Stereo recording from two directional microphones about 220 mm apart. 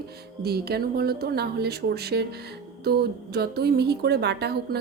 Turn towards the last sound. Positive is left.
turn(degrees=-45)  # may be behind; listen again after turning